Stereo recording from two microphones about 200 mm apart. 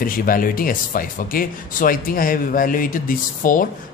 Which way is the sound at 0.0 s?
45° left (ahead or behind).